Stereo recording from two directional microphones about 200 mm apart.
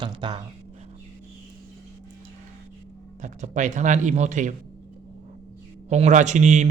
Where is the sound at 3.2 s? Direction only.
40° right (ahead or behind).